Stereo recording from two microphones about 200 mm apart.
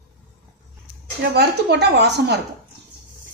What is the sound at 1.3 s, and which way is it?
A woman's voice, 55° right (ahead or behind).